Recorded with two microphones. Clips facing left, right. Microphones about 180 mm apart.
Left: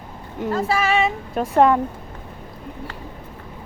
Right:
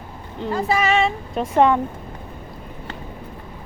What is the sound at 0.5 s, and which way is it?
Speech, 5° left (ahead or behind).